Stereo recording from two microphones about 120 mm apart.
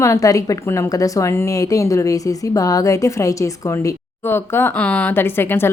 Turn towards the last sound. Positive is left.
turn(degrees=20)  # may be behind; listen again after turning